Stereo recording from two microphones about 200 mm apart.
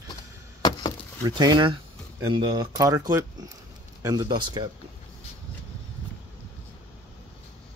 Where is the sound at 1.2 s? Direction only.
20° right (ahead or behind).